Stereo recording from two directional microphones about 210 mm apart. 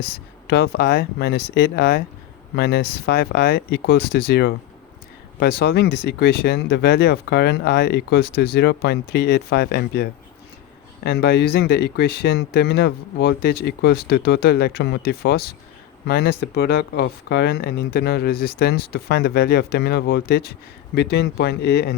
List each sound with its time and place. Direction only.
0.4 s speech: 50° left (ahead or behind)